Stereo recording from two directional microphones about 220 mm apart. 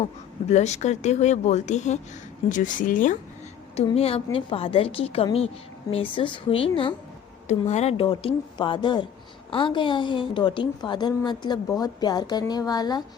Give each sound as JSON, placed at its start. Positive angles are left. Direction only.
{"t": 0.0, "sound": "a woman's voice", "side_deg": 30}